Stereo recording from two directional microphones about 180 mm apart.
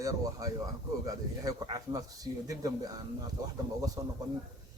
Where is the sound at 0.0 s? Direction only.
20° right (ahead or behind).